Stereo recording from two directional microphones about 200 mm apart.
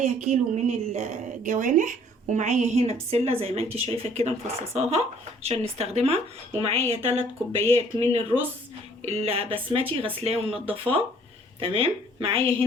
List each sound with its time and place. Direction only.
0.0 s a woman's voice: 35° right (ahead or behind)